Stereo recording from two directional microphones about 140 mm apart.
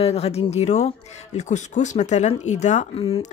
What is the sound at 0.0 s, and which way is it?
Speech, 50° left (ahead or behind).